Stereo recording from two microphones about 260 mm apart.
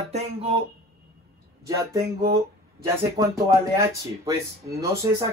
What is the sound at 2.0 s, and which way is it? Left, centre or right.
Speech, right.